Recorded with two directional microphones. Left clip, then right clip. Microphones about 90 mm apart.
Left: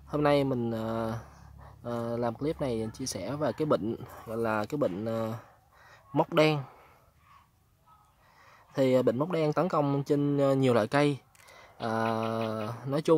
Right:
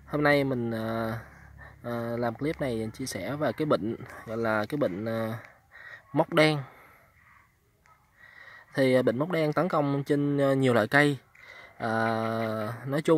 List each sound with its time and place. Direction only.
0.1 s speech: 20° right (ahead or behind)
8.4 s speech: 20° right (ahead or behind)